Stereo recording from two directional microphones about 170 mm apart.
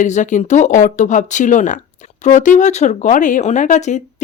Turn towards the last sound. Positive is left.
turn(degrees=45)  # may be behind; listen again after turning